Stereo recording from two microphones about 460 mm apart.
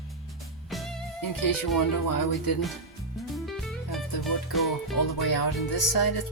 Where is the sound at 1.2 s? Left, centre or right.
Left.